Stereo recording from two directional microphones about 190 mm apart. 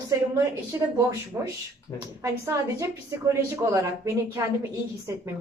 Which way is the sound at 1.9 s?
20° left (ahead or behind).